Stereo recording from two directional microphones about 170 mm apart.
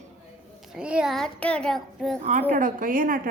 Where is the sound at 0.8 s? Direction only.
5° right (ahead or behind).